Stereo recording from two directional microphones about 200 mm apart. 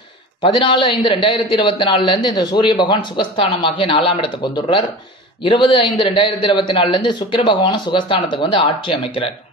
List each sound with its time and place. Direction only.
0.4 s speech: 25° left (ahead or behind)